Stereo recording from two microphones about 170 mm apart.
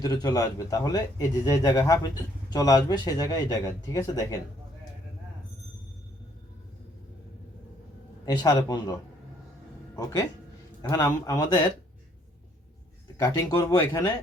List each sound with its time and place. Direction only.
0.0 s speech: 20° left (ahead or behind)
8.2 s speech: 20° left (ahead or behind)
13.1 s speech: 20° left (ahead or behind)